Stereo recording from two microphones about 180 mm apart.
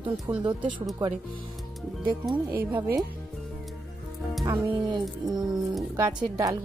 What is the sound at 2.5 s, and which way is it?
Speech, 10° right (ahead or behind).